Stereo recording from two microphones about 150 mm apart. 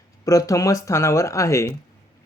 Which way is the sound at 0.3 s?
25° left (ahead or behind).